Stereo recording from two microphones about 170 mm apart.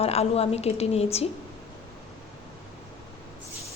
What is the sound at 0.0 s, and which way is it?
Speech, 35° left (ahead or behind).